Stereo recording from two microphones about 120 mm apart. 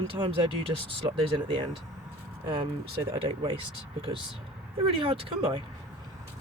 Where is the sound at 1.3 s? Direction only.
45° right (ahead or behind).